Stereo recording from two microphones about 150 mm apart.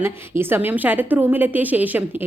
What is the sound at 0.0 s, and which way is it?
A woman's voice, 15° right (ahead or behind).